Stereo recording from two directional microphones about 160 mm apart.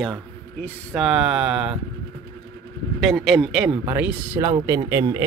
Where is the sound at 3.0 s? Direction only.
Centre (ahead or behind).